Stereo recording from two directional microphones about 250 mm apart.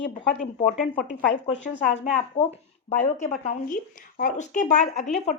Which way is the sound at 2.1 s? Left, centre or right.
Left.